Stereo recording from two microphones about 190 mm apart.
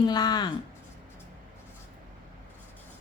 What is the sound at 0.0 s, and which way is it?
Speech, 20° left (ahead or behind).